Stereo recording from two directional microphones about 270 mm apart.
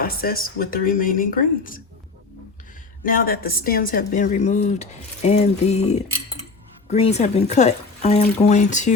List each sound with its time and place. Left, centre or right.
0.0 s a woman's voice: left
3.0 s speech: left